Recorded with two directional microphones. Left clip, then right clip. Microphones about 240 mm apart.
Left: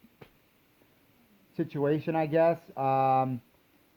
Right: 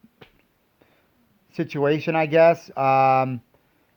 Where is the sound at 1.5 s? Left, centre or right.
Right.